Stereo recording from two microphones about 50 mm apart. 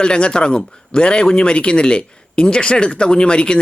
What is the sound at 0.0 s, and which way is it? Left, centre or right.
Speech, centre.